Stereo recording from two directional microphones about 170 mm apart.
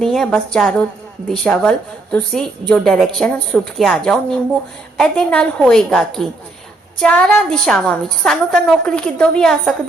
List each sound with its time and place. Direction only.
0.0 s a woman's voice: centre (ahead or behind)